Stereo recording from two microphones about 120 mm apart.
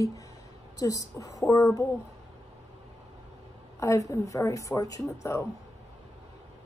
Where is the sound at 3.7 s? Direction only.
25° left (ahead or behind).